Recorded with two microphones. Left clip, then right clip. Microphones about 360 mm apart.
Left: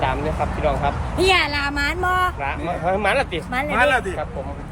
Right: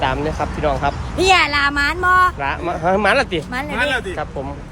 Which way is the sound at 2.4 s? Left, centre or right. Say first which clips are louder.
Right 4 dB; right.